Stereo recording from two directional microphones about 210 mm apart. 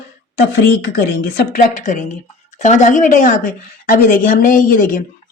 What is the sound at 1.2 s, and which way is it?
A woman's voice, 40° left (ahead or behind).